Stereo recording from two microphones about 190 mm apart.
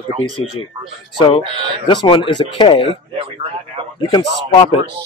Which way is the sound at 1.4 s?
25° right (ahead or behind).